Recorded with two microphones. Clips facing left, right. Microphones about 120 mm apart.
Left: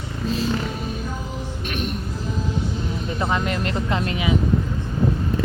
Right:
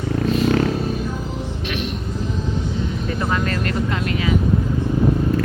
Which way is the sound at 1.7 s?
45° left (ahead or behind).